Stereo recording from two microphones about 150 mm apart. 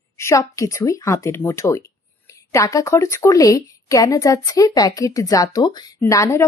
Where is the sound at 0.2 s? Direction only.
20° left (ahead or behind).